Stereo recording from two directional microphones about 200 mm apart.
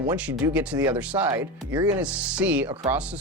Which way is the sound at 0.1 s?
10° right (ahead or behind).